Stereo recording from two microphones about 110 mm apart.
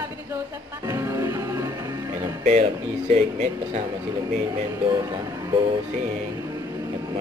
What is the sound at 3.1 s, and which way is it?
Speech, 90° right.